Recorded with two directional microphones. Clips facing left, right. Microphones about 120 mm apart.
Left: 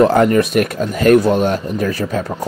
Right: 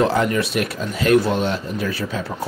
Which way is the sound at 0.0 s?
50° left (ahead or behind).